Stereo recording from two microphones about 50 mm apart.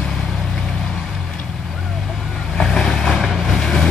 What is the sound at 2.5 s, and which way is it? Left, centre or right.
Vehicle, centre.